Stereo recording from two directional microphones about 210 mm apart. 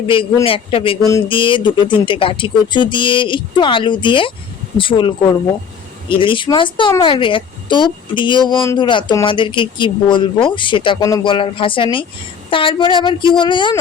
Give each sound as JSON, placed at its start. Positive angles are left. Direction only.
{"t": 0.4, "sound": "speech", "side_deg": 25}